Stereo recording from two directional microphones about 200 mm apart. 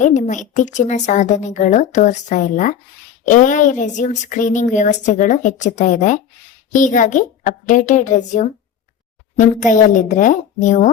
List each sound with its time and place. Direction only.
0.0 s a woman's voice: 40° left (ahead or behind)